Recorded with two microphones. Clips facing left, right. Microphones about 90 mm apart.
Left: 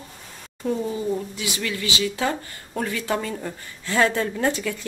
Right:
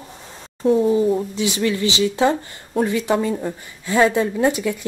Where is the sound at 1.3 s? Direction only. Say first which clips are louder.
Right 8 dB; 25° right (ahead or behind).